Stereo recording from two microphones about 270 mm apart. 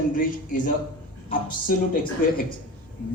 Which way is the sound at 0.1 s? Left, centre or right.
Left.